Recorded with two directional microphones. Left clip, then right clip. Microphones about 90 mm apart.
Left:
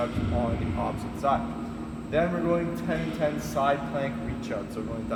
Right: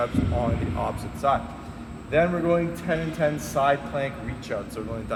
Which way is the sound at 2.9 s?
40° right (ahead or behind).